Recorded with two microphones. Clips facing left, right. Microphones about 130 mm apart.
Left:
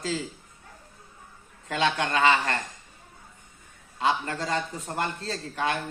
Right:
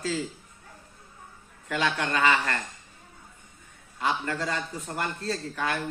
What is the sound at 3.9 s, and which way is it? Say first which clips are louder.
A man's voice: left 2 dB; 25° left (ahead or behind).